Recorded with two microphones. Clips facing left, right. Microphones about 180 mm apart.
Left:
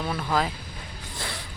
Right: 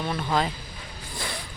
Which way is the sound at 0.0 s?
Centre (ahead or behind).